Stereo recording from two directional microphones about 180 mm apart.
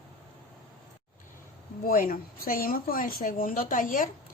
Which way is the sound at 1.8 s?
50° left (ahead or behind).